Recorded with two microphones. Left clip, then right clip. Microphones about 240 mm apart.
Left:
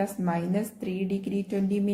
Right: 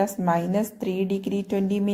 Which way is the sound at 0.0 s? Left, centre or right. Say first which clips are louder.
Right 6 dB; right.